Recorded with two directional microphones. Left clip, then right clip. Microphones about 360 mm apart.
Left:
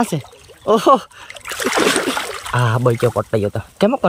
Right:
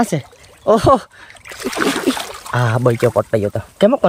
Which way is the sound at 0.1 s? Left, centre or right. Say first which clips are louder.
Right 3 dB; centre.